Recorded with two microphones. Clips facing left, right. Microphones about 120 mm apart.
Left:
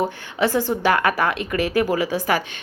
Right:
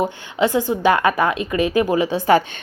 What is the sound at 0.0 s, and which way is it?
A woman's voice, 20° right (ahead or behind).